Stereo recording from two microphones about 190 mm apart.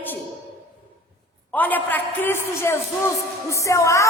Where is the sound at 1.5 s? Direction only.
10° left (ahead or behind).